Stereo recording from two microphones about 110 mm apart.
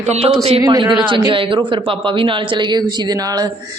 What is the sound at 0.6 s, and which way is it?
Speech, 40° right (ahead or behind).